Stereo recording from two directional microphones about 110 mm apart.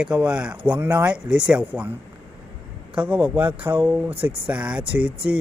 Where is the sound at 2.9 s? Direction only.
15° right (ahead or behind).